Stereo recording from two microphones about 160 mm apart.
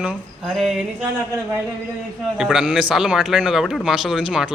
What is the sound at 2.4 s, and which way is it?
A man's voice, centre (ahead or behind).